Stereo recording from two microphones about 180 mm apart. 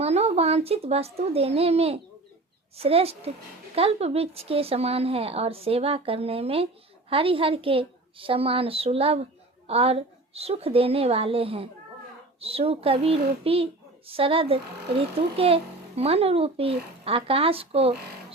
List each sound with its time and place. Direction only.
0.0 s a child's voice: 35° right (ahead or behind)